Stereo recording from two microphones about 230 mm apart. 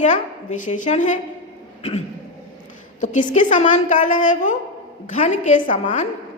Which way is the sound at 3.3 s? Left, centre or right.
Left.